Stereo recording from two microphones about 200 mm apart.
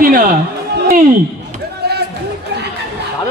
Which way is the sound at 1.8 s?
55° right (ahead or behind).